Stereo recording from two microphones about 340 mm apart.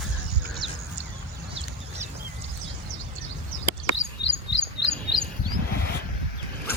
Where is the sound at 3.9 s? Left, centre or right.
Left.